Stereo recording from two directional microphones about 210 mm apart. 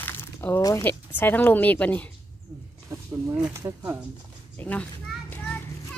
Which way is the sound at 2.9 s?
15° right (ahead or behind).